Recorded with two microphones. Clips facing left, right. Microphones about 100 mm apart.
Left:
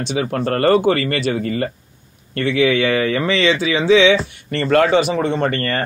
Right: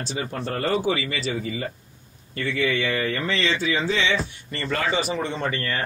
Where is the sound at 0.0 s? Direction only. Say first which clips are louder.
Left 9 dB; 75° left (ahead or behind).